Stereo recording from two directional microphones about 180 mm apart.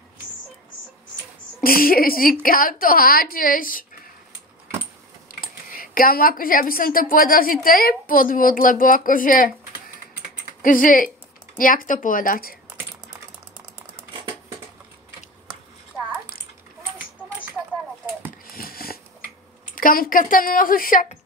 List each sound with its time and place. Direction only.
1.6 s a woman's voice: 55° left (ahead or behind)
5.3 s a woman's voice: 50° left (ahead or behind)
10.6 s a woman's voice: 50° left (ahead or behind)
18.5 s sniff: 55° left (ahead or behind)
19.7 s speech: 50° left (ahead or behind)